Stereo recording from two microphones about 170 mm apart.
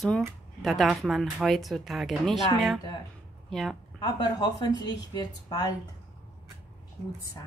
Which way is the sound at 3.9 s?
25° left (ahead or behind).